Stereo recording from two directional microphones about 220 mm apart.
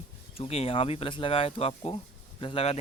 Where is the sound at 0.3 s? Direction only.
25° left (ahead or behind).